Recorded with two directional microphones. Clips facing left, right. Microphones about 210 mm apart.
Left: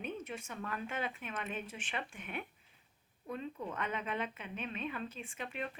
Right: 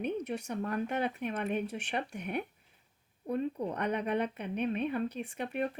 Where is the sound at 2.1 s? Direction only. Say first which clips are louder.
Right 8 dB; 40° right (ahead or behind).